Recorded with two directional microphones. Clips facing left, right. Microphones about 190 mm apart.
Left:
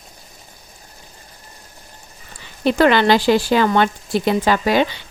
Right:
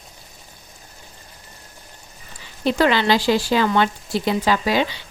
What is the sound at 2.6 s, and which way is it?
Speech, 60° left (ahead or behind).